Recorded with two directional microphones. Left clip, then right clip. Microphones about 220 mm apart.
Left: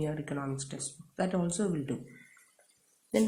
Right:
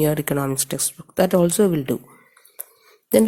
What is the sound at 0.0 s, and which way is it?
Speech, 50° right (ahead or behind).